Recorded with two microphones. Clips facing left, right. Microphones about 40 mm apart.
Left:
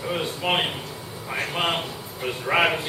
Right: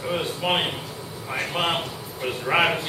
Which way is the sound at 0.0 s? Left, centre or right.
Centre.